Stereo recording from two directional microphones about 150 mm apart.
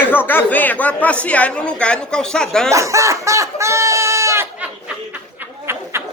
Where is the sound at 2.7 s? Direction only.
20° right (ahead or behind).